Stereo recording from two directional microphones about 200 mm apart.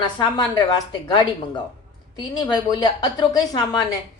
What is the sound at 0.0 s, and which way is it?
A woman's voice, 20° left (ahead or behind).